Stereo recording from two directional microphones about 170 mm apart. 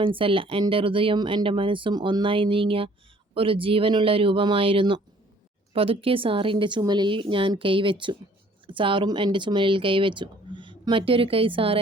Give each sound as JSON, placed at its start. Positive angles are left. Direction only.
{"t": 0.0, "sound": "speech", "side_deg": -30}